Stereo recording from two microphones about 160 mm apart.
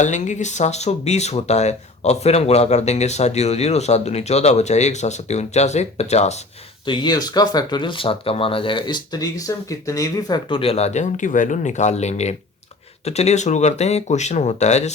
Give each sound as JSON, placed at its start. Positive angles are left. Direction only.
{"t": 0.0, "sound": "speech", "side_deg": 50}
{"t": 6.8, "sound": "speech", "side_deg": 30}